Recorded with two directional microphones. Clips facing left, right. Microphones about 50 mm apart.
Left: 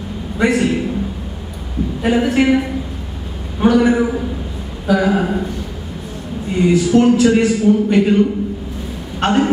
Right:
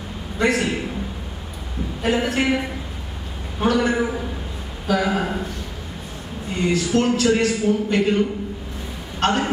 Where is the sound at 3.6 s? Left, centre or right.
Centre.